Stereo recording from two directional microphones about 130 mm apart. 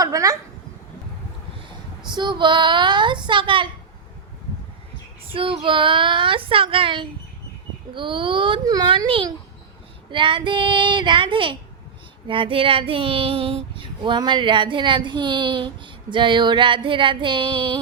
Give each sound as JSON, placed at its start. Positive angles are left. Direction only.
{"t": 0.0, "sound": "speech", "side_deg": -25}
{"t": 2.0, "sound": "child singing", "side_deg": -35}
{"t": 5.3, "sound": "child singing", "side_deg": -40}